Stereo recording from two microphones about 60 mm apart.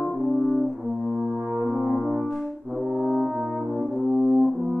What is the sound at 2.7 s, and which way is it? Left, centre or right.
Brass instrument, centre.